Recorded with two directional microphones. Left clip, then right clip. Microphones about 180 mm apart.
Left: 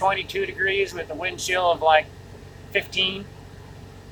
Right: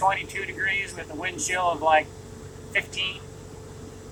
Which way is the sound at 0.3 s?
40° left (ahead or behind).